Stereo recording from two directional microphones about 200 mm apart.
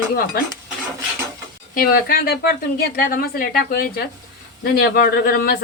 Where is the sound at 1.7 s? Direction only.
45° left (ahead or behind).